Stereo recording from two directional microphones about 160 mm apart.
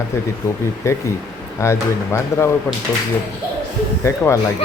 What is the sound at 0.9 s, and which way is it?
Speech, 20° left (ahead or behind).